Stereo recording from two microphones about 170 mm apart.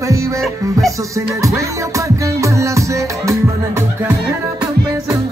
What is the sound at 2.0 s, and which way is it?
Music, 20° right (ahead or behind).